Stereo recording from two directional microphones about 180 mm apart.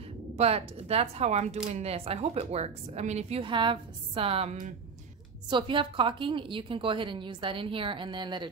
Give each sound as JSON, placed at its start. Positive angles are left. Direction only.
{"t": 0.4, "sound": "a woman's voice", "side_deg": -35}